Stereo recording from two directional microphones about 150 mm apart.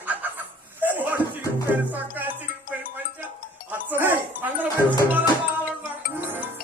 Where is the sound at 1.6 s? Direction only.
10° right (ahead or behind).